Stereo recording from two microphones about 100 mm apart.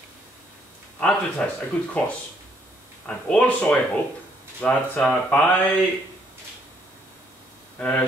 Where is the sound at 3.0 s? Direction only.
10° left (ahead or behind).